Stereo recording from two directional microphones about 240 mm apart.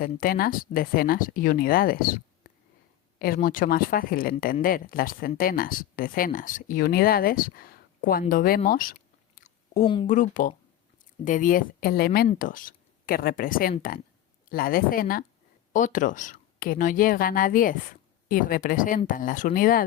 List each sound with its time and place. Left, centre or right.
0.0 s speech: left
3.2 s speech: left
8.2 s chewing: left
9.8 s speech: centre
10.1 s speech: left